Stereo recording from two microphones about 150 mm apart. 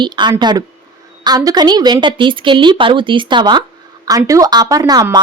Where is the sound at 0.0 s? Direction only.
30° right (ahead or behind).